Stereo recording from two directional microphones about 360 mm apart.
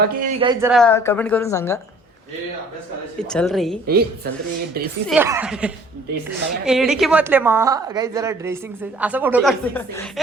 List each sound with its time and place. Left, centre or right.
0.0 s speech: right
0.7 s speech: centre
3.2 s a woman's voice: centre
3.8 s a woman's voice: right
5.0 s a woman's voice: centre